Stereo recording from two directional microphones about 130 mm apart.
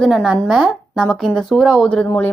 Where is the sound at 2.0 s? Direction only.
15° left (ahead or behind).